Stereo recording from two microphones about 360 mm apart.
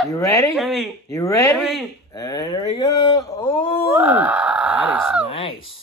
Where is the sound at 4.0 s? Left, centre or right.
Centre.